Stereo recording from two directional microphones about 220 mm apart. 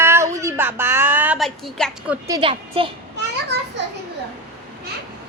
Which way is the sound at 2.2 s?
20° right (ahead or behind).